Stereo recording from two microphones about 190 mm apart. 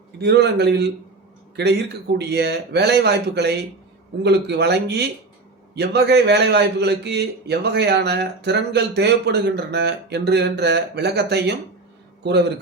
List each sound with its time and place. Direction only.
0.2 s a man's voice: 60° right (ahead or behind)